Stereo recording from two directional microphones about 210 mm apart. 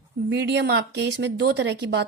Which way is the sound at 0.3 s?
55° right (ahead or behind).